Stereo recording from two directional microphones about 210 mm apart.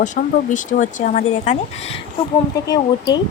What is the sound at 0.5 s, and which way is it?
Speech, 35° left (ahead or behind).